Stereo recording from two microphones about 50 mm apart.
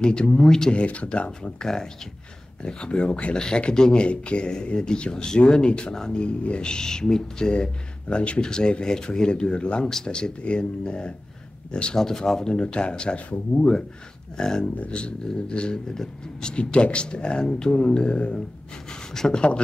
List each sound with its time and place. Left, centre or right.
0.0 s speech: centre
18.9 s speech: centre